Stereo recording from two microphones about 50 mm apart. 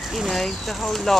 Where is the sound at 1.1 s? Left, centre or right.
Centre.